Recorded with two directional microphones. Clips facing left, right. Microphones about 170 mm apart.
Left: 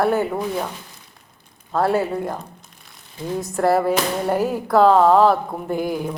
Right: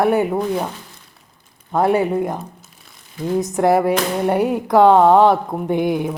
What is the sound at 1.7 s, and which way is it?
Speech, 20° right (ahead or behind).